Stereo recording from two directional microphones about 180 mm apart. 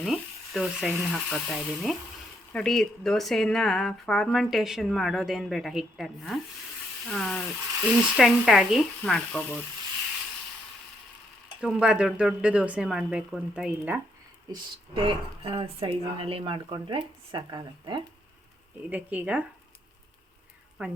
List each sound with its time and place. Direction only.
0.0 s speech: centre (ahead or behind)
11.6 s speech: 5° right (ahead or behind)
14.5 s speech: 20° right (ahead or behind)
18.9 s speech: 10° right (ahead or behind)
20.8 s speech: 5° right (ahead or behind)